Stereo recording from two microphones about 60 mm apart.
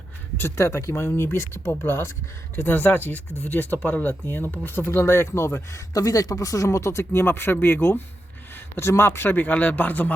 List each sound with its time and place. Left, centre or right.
0.3 s speech: left
5.9 s speech: left
7.1 s speech: left